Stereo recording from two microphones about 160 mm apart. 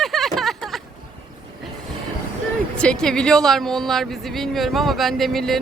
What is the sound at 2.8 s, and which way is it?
Speech, 5° left (ahead or behind).